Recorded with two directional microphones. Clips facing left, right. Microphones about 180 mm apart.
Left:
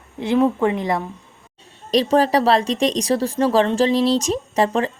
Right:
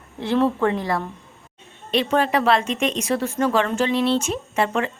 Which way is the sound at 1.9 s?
35° left (ahead or behind).